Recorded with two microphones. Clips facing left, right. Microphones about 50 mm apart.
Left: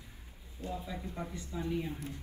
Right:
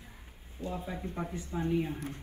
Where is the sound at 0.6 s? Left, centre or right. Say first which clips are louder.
Right 3 dB; right.